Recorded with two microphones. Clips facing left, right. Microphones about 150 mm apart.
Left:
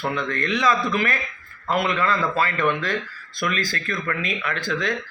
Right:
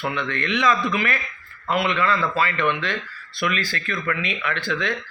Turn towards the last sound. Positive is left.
turn(degrees=40)  # may be behind; listen again after turning